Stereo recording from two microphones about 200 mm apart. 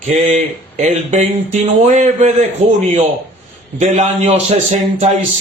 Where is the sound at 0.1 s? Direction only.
35° right (ahead or behind).